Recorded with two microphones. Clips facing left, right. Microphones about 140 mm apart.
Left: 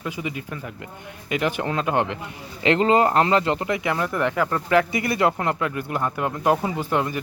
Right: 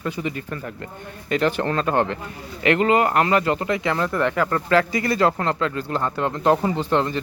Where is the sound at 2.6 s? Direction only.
25° left (ahead or behind).